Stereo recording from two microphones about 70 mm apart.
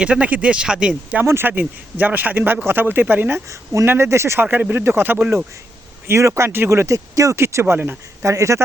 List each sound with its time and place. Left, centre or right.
0.0 s speech: centre
1.2 s speech: right
3.5 s speech: right
3.8 s speech: right
6.1 s speech: right
8.2 s speech: right